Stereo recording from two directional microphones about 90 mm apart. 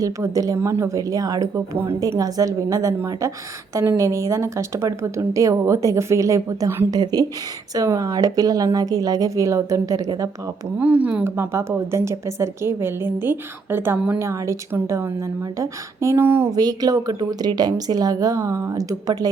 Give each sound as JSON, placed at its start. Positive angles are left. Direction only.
{"t": 0.0, "sound": "a woman's voice", "side_deg": -40}
{"t": 6.9, "sound": "a woman's voice", "side_deg": -45}
{"t": 10.8, "sound": "a woman's voice", "side_deg": -15}
{"t": 16.5, "sound": "a woman's voice", "side_deg": -45}